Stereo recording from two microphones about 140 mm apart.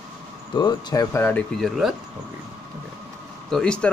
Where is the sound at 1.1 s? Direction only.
15° left (ahead or behind).